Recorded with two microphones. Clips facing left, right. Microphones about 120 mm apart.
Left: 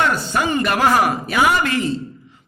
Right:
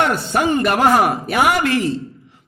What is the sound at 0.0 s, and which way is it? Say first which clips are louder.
A man's voice: right 2 dB; 60° right (ahead or behind).